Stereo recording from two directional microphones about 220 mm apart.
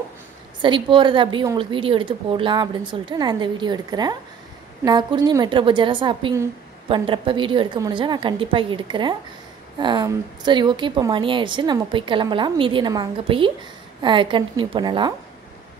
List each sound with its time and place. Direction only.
0.6 s a woman's voice: 20° right (ahead or behind)